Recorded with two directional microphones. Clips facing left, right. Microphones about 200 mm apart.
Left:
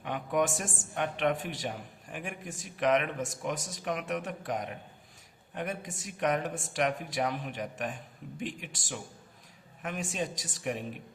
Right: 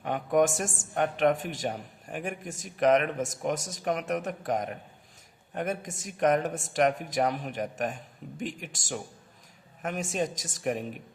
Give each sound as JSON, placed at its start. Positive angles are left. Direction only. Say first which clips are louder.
{"t": 0.0, "sound": "a woman's voice", "louder": "right 5 dB", "side_deg": -45}